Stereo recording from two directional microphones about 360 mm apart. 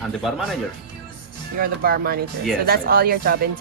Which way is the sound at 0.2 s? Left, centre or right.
Centre.